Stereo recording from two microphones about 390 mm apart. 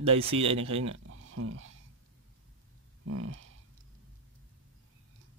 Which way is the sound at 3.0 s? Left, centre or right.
Right.